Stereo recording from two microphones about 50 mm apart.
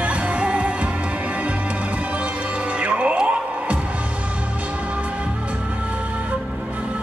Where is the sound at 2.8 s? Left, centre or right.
Right.